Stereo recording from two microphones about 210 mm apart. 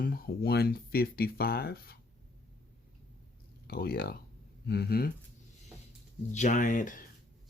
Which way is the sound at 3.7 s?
45° left (ahead or behind).